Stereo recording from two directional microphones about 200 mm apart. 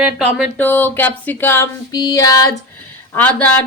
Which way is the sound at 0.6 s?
10° left (ahead or behind).